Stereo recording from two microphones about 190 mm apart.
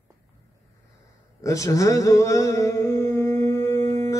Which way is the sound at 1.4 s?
15° left (ahead or behind).